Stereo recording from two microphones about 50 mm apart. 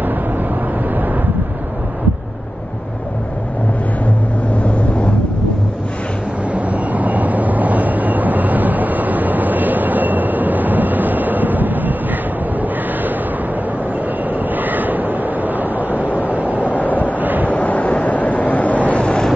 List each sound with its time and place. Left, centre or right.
6.5 s vehicle: right
14.5 s vehicle: right
16.7 s vehicle: left
17.2 s vehicle: right
17.5 s vehicle: left